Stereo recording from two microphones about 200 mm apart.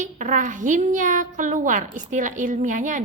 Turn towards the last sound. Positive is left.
turn(degrees=-40)  # may be behind; listen again after turning